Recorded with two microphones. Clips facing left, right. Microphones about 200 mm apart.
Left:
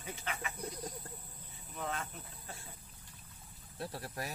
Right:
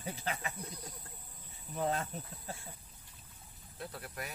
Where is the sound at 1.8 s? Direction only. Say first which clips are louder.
Right 6 dB; 35° right (ahead or behind).